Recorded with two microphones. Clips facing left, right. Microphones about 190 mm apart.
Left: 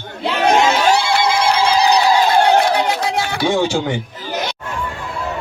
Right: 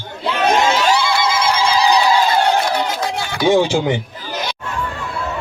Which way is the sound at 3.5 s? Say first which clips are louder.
Right 4 dB; 15° right (ahead or behind).